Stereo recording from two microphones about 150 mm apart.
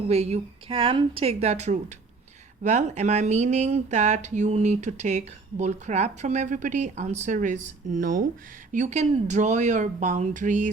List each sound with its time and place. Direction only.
0.1 s speech: 45° right (ahead or behind); by 8.3 s 60° right (ahead or behind)
8.7 s speech: 50° right (ahead or behind)